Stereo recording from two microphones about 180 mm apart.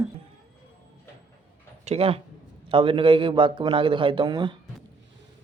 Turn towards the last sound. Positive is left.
turn(degrees=-25)  # may be behind; listen again after turning